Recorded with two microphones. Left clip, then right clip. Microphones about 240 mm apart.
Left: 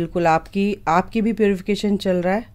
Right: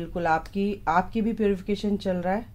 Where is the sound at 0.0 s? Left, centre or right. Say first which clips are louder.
Left 7 dB; left.